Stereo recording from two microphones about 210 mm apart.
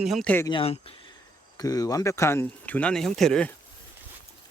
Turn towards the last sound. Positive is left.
turn(degrees=5)  # may be behind; listen again after turning